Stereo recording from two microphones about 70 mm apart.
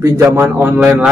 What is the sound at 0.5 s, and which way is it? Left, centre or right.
Speech, right.